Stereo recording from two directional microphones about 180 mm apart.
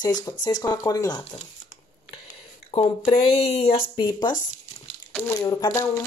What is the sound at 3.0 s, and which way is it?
Speech, 35° left (ahead or behind).